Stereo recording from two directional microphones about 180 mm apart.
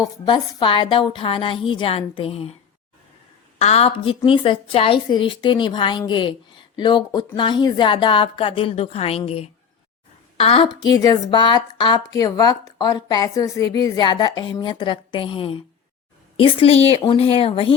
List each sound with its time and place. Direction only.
0.0 s a woman's voice: 25° left (ahead or behind)
3.6 s a woman's voice: 35° left (ahead or behind)